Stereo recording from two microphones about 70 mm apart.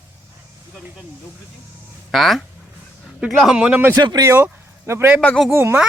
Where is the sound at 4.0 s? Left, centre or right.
Right.